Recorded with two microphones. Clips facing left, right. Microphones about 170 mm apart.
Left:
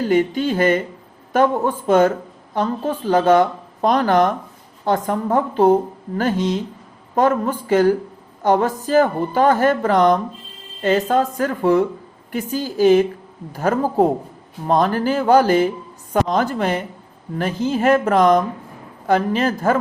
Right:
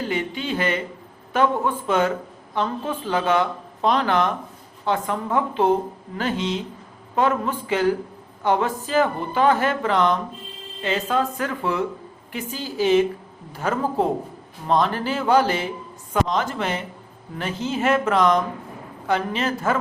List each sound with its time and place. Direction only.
0.1 s a woman's voice: 45° left (ahead or behind)